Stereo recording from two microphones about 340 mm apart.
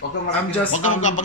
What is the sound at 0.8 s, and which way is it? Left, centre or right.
Speech, left.